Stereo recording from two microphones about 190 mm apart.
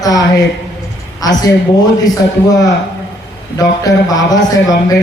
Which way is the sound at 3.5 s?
20° left (ahead or behind).